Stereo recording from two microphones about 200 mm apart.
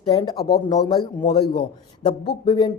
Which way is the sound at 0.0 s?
20° left (ahead or behind).